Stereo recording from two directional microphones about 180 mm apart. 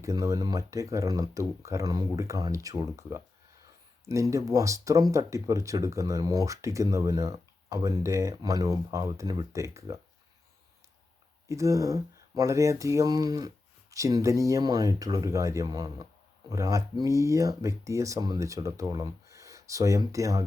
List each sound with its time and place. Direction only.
0.0 s speech: 20° right (ahead or behind)
11.4 s speech: 15° right (ahead or behind)